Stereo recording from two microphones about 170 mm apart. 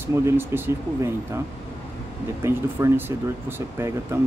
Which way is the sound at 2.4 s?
15° right (ahead or behind).